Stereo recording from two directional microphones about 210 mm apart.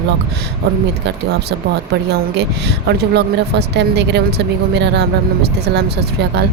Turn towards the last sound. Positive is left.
turn(degrees=-55)  # may be behind; listen again after turning